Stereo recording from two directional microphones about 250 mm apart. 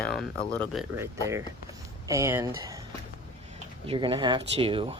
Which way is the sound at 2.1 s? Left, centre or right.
Centre.